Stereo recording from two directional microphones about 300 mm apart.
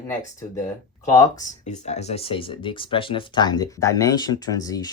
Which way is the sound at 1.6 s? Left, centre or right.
Left.